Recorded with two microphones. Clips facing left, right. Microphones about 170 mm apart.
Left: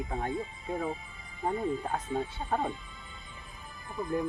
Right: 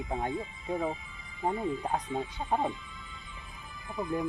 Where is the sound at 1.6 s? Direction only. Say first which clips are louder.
Left 1 dB; 45° left (ahead or behind).